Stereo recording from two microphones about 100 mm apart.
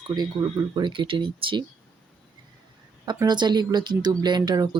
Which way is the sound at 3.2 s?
45° right (ahead or behind).